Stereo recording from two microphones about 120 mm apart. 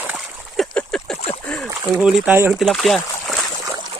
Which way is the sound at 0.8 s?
10° left (ahead or behind).